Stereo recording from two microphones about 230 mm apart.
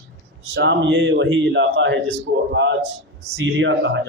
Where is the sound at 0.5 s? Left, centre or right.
Right.